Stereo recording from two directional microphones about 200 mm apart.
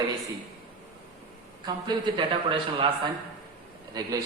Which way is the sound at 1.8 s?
25° right (ahead or behind).